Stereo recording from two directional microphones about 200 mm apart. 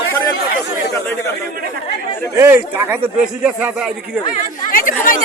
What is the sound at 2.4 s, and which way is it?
A man's voice, 10° right (ahead or behind).